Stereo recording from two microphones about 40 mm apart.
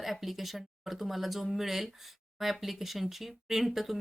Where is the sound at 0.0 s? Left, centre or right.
Centre.